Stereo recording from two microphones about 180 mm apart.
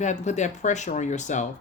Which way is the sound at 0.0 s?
40° left (ahead or behind).